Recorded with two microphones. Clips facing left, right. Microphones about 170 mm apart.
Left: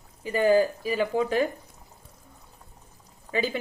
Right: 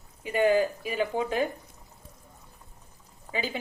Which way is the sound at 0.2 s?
35° left (ahead or behind).